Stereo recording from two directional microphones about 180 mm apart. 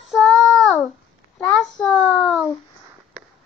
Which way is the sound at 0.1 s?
Centre (ahead or behind).